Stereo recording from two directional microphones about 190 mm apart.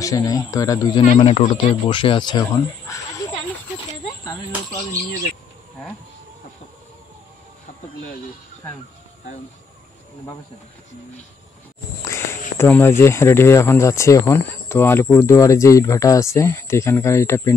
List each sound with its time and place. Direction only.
0.0 s speech: 20° left (ahead or behind)
1.0 s speech: 35° left (ahead or behind)
12.0 s speech: 15° left (ahead or behind)